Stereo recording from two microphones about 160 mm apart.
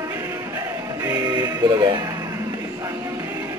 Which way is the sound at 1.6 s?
25° right (ahead or behind).